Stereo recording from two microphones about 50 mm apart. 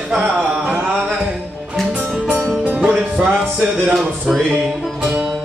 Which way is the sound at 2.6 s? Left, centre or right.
Right.